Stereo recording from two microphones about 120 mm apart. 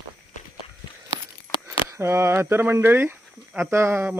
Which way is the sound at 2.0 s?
20° right (ahead or behind).